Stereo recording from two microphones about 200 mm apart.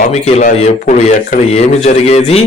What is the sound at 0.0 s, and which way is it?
Speech, 35° left (ahead or behind).